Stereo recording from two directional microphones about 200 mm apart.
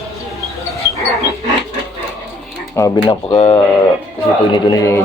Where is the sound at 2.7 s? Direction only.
15° left (ahead or behind).